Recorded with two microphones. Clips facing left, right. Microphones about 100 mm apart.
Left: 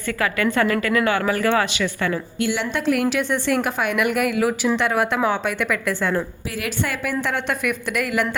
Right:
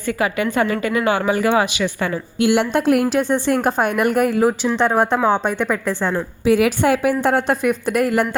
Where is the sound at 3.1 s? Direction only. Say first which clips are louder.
Right 4 dB; 35° right (ahead or behind).